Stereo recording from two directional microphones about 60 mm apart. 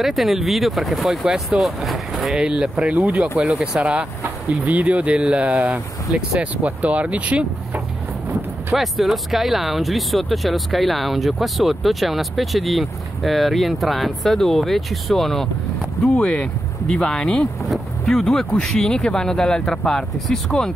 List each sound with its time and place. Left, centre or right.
0.0 s speech: centre
2.3 s speech: centre
8.7 s speech: centre
16.2 s speech: centre